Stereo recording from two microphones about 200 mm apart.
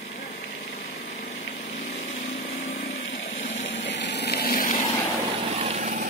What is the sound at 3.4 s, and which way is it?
Vehicle, 65° left (ahead or behind).